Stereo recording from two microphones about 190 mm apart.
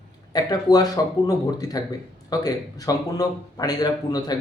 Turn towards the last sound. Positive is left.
turn(degrees=20)  # may be behind; listen again after turning